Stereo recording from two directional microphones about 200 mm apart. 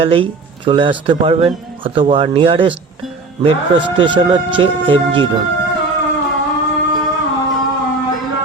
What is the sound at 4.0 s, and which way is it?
Speech, 25° right (ahead or behind).